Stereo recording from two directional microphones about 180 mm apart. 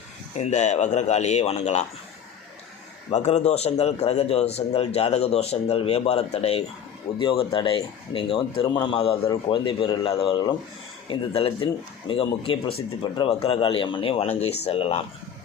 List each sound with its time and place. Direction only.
0.3 s a man's voice: 40° left (ahead or behind)
3.1 s a man's voice: 40° left (ahead or behind)